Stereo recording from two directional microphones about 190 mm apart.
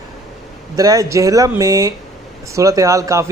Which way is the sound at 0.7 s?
20° right (ahead or behind).